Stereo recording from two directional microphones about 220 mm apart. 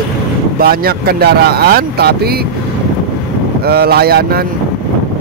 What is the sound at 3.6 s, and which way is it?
Speech, 45° right (ahead or behind).